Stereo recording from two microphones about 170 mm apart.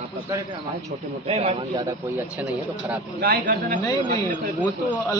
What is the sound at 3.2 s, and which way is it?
Speech, 55° right (ahead or behind).